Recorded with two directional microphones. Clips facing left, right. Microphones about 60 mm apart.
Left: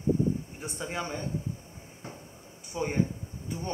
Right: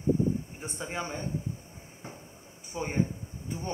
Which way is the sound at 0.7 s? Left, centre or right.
Centre.